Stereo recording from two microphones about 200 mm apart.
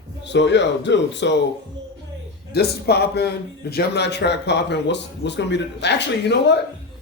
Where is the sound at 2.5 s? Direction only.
55° left (ahead or behind).